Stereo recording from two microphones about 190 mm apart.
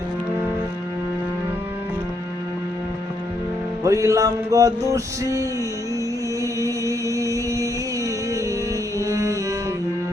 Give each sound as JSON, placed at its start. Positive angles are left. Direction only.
{"t": 3.8, "sound": "music", "side_deg": -15}